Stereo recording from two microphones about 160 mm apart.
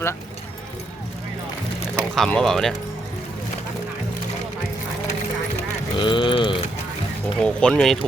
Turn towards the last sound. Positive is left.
turn(degrees=5)  # may be behind; listen again after turning